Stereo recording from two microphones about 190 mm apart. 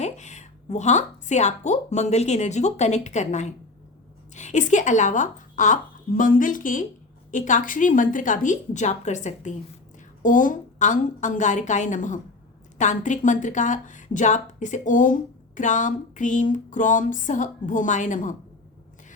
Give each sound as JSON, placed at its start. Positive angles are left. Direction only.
{"t": 0.0, "sound": "a woman's voice", "side_deg": 40}